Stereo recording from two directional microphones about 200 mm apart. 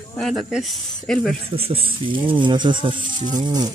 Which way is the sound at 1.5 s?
25° right (ahead or behind).